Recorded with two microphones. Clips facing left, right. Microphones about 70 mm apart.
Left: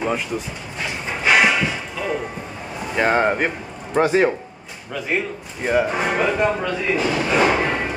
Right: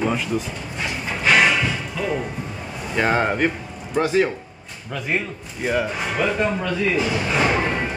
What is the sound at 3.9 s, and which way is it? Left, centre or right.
Speech, left.